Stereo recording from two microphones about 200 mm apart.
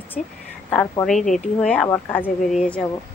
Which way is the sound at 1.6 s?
5° left (ahead or behind).